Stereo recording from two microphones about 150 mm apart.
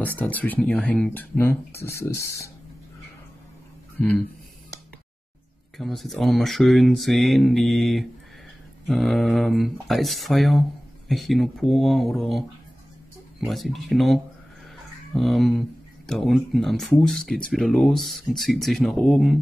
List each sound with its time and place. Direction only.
0.0 s speech: 10° left (ahead or behind)
5.8 s speech: centre (ahead or behind)